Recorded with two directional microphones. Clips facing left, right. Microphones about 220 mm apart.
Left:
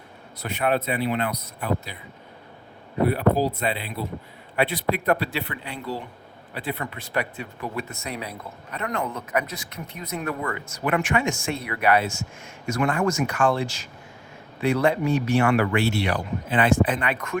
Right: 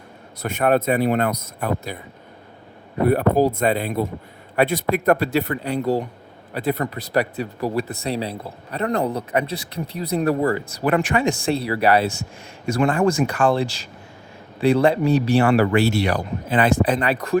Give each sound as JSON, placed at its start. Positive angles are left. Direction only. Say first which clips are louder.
{"t": 0.4, "sound": "speech", "louder": "right 6 dB", "side_deg": -45}
{"t": 3.1, "sound": "speech", "louder": "right 6 dB", "side_deg": -50}